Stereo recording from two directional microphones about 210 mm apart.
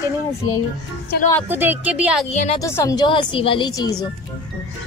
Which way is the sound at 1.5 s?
10° right (ahead or behind).